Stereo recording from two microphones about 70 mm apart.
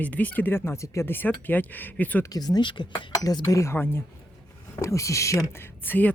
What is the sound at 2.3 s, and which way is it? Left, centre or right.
Speech, left.